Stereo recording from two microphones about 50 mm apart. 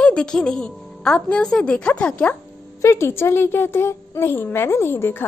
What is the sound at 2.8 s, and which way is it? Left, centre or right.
A woman's voice, left.